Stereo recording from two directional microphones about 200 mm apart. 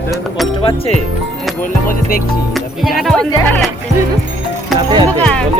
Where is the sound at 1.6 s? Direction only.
45° left (ahead or behind).